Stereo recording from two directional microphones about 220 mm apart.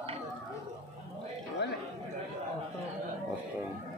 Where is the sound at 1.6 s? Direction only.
50° left (ahead or behind).